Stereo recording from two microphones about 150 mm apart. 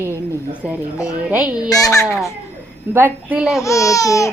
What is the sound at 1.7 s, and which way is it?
Speech, 20° left (ahead or behind).